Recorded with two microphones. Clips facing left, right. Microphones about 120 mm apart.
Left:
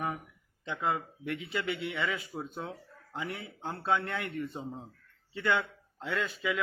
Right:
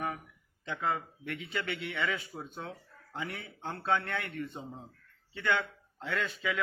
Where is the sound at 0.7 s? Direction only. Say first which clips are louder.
Left 1 dB; 15° left (ahead or behind).